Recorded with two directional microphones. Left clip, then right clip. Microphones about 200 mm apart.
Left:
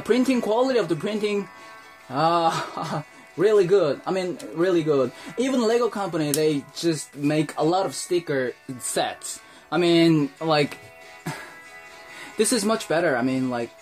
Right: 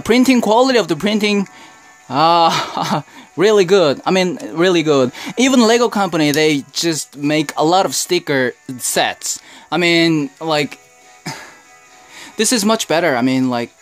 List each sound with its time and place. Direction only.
0.0 s speech: 40° right (ahead or behind)
2.4 s speech: 40° right (ahead or behind)
8.3 s speech: 90° right
9.0 s speech: 35° right (ahead or behind)
12.4 s speech: 35° right (ahead or behind)